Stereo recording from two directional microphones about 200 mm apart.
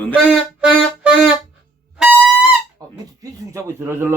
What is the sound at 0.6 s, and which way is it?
Music, 5° right (ahead or behind).